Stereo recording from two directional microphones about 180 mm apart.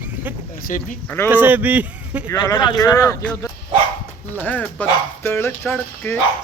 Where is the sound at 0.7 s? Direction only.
45° left (ahead or behind).